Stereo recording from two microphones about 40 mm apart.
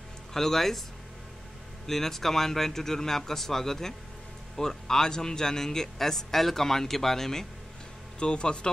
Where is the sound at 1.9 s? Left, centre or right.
Centre.